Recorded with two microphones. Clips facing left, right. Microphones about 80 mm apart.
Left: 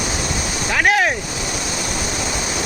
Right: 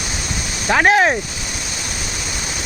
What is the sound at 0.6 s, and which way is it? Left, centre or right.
Speech, right.